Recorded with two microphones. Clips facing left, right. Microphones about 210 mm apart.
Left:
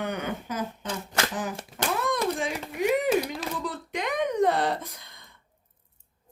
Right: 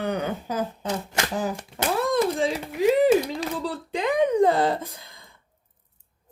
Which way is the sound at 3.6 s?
30° right (ahead or behind).